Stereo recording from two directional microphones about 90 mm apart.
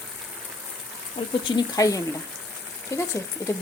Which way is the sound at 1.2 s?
75° left (ahead or behind).